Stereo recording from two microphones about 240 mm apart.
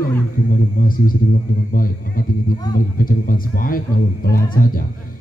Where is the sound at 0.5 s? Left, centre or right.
Left.